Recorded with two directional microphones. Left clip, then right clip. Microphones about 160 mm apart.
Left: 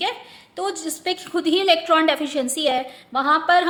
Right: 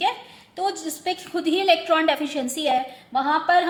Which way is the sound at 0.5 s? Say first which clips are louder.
Even; 25° left (ahead or behind).